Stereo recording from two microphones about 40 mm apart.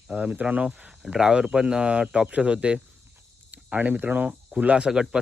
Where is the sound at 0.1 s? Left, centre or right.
Right.